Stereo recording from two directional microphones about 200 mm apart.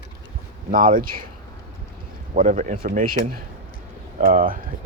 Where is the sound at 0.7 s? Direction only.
45° right (ahead or behind).